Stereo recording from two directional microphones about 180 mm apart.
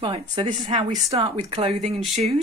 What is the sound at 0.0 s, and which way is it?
Speech, 30° right (ahead or behind).